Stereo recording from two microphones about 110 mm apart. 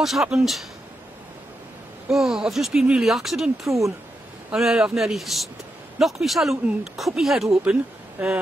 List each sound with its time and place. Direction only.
0.0 s speech: centre (ahead or behind)
2.0 s speech: 5° right (ahead or behind)